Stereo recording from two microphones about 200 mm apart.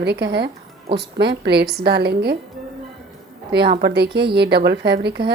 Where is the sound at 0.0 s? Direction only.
55° right (ahead or behind).